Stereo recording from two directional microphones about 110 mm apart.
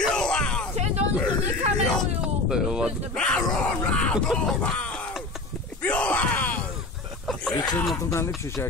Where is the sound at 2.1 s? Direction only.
5° right (ahead or behind).